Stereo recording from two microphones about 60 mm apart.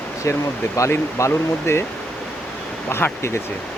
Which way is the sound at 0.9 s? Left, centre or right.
Left.